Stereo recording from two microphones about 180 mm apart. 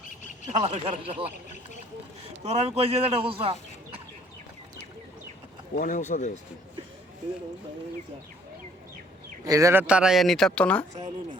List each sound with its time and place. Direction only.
0.6 s a man's voice: 30° right (ahead or behind)
2.5 s a man's voice: 35° right (ahead or behind)
5.7 s speech: 45° left (ahead or behind)
9.5 s speech: 15° right (ahead or behind)
9.8 s speech: 5° right (ahead or behind)